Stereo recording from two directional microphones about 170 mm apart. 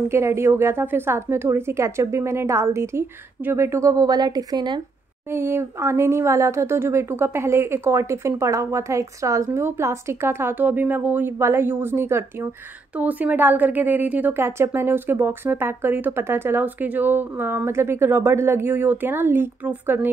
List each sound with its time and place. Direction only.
0.1 s speech: 15° right (ahead or behind)
5.3 s speech: 15° right (ahead or behind)